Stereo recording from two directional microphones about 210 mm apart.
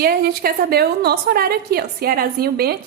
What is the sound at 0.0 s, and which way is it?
A woman's voice, 45° right (ahead or behind).